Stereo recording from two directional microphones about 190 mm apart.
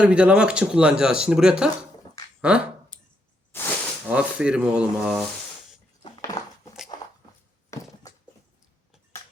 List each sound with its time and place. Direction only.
0.0 s speech: 5° right (ahead or behind)
2.9 s a sound: 5° left (ahead or behind)
3.5 s snake: 10° left (ahead or behind)
4.1 s speech: 5° right (ahead or behind)
6.0 s crushing: 20° left (ahead or behind)
7.7 s a sound: 15° left (ahead or behind)